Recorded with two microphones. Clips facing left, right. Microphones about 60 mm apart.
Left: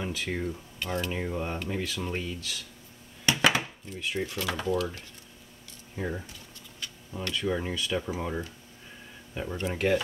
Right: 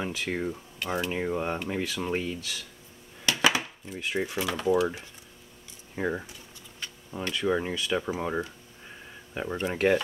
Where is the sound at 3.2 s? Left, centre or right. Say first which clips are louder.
Even; centre.